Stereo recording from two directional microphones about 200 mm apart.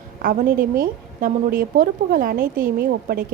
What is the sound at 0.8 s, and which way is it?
A woman's voice, 45° right (ahead or behind).